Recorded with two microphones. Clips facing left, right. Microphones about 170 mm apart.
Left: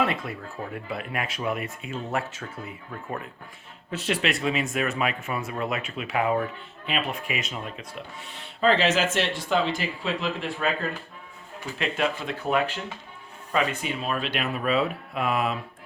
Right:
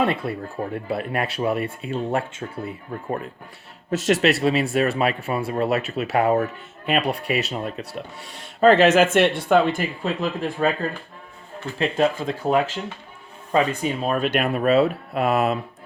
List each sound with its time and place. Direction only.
0.0 s speech: 30° right (ahead or behind); by 10.7 s 45° right (ahead or behind)
11.8 s speech: 35° right (ahead or behind)